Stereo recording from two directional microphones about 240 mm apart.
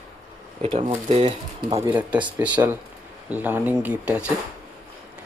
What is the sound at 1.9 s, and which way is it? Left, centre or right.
Speech, centre.